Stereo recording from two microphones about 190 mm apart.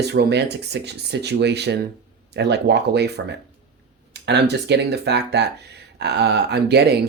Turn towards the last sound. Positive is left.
turn(degrees=-60)  # may be behind; listen again after turning